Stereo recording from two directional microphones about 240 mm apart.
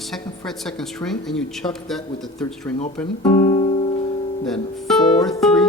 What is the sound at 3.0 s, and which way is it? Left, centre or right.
Speech, centre.